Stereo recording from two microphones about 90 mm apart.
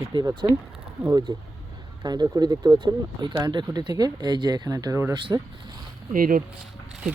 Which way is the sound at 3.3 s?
50° right (ahead or behind).